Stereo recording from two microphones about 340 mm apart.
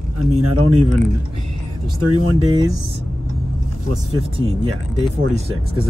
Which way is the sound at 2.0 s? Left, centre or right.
Right.